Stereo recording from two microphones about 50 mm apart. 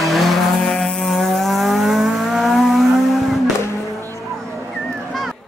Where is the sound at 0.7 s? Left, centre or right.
Centre.